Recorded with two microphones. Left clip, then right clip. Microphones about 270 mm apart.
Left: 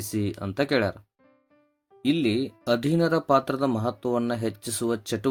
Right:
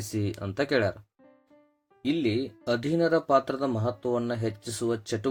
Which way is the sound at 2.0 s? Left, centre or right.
Left.